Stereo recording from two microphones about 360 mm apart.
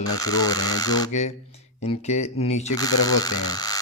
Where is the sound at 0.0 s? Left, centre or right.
Centre.